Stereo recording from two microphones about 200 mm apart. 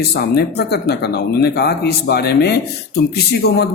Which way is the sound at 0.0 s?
55° left (ahead or behind).